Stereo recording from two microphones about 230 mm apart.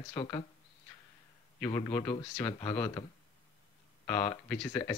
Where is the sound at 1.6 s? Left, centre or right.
Centre.